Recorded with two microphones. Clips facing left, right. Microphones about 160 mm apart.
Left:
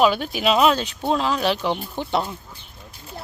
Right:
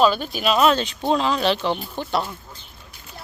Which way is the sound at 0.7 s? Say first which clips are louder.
Right 1 dB; 5° left (ahead or behind).